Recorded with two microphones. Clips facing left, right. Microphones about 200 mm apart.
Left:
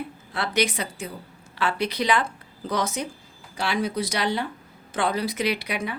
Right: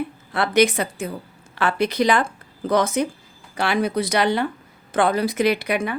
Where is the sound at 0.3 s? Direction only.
55° right (ahead or behind).